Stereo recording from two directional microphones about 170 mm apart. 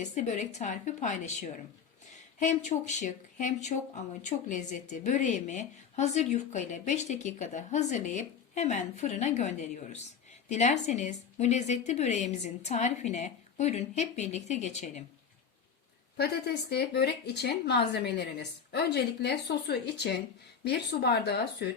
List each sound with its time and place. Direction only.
0.0 s speech: 45° left (ahead or behind)
2.4 s a woman's voice: 45° left (ahead or behind)
16.1 s a woman's voice: 70° left (ahead or behind)